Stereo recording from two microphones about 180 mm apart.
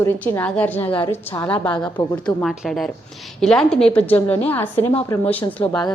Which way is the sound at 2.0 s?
25° left (ahead or behind).